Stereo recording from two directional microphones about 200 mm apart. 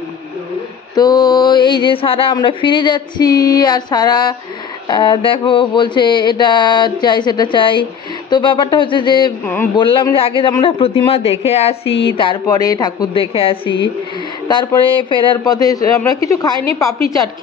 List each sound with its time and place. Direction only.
0.9 s a man's voice: 20° left (ahead or behind)